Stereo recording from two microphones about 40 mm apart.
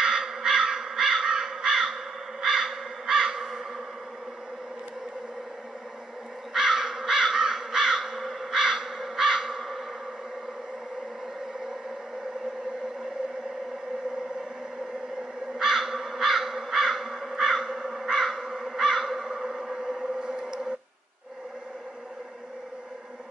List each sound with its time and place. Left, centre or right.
0.0 s crow: centre
6.5 s crow: centre
15.6 s crow: centre